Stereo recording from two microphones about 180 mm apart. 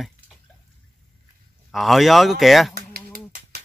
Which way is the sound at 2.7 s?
60° right (ahead or behind).